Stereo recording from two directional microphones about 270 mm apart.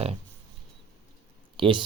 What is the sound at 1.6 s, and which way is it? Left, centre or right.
Speech, centre.